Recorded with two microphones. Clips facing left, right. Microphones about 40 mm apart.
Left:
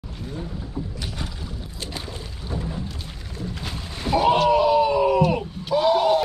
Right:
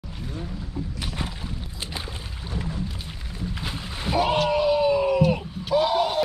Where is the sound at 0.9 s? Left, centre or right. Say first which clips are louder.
Right 1 dB; right.